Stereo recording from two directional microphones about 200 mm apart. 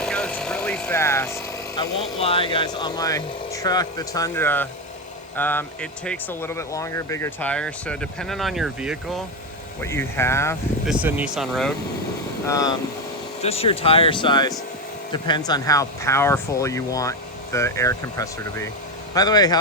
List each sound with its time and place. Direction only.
0.0 s speech: 5° left (ahead or behind)
9.8 s speech: 10° left (ahead or behind)
10.8 s speech: 5° right (ahead or behind)
12.5 s speech: 15° left (ahead or behind)
13.4 s speech: 30° left (ahead or behind)